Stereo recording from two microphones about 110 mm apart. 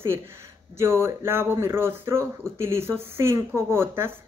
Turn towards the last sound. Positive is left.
turn(degrees=-20)  # may be behind; listen again after turning